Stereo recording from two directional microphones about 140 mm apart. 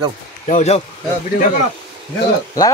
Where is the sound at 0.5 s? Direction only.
50° left (ahead or behind).